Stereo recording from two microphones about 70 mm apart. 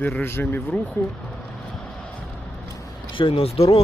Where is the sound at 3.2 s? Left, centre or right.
Left.